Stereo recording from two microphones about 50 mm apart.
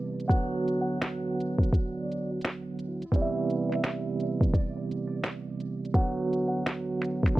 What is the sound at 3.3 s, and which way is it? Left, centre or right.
Music, centre.